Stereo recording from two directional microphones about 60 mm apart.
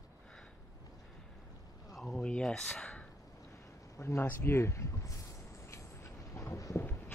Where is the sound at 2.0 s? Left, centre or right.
Centre.